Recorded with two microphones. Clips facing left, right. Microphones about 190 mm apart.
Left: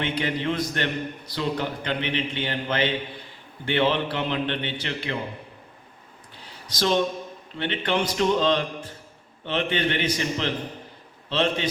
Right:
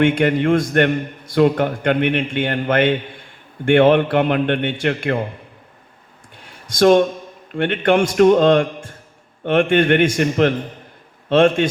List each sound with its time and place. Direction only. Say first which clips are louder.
0.0 s a man's voice: right 11 dB; 50° right (ahead or behind)
6.7 s a man's voice: right 10 dB; 50° right (ahead or behind)